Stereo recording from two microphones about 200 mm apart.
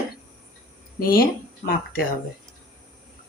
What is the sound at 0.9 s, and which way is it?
Speech, 45° left (ahead or behind).